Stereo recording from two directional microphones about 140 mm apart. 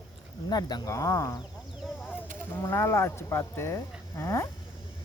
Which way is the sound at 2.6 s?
20° left (ahead or behind).